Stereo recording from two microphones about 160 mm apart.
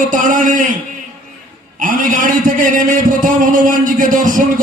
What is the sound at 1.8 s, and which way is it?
A man's voice, 55° right (ahead or behind).